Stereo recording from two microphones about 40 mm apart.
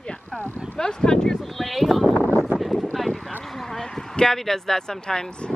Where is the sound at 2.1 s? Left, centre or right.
Left.